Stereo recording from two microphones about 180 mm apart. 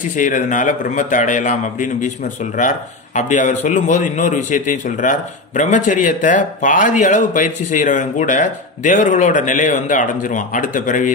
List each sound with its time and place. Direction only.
0.2 s a man's voice: 45° left (ahead or behind)